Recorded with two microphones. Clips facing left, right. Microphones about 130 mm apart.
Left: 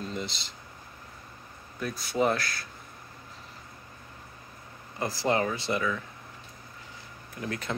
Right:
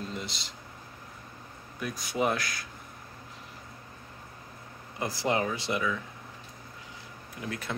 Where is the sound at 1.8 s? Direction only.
15° right (ahead or behind).